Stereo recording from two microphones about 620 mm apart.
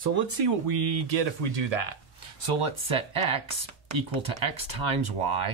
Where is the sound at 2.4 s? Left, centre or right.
Right.